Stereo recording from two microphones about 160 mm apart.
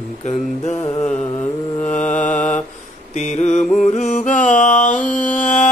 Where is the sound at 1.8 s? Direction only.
50° left (ahead or behind).